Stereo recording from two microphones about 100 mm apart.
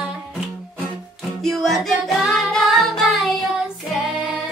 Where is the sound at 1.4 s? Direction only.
5° left (ahead or behind).